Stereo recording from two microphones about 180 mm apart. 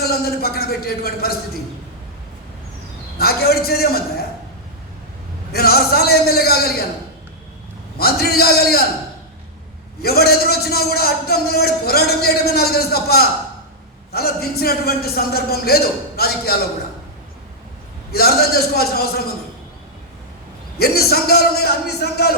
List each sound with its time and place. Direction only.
0.0 s a man's voice: 60° left (ahead or behind)
3.2 s a man's voice: 60° left (ahead or behind)
5.5 s a man's voice: 60° left (ahead or behind)
7.9 s a man's voice: 60° left (ahead or behind)
10.0 s a man's voice: 60° left (ahead or behind)
18.1 s a man's voice: 60° left (ahead or behind)
20.7 s a man's voice: 60° left (ahead or behind)